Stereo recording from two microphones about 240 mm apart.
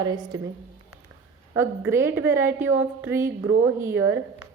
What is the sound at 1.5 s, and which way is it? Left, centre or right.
A woman's voice, centre.